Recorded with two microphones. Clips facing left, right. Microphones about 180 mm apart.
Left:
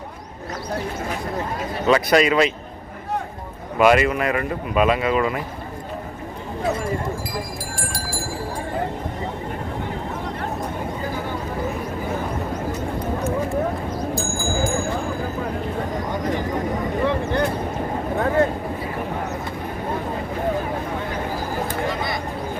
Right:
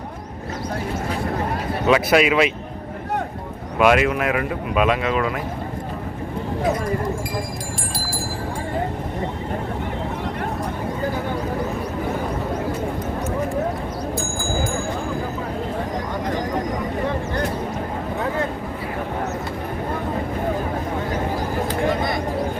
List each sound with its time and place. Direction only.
1.9 s speech: 5° right (ahead or behind)
3.8 s speech: centre (ahead or behind)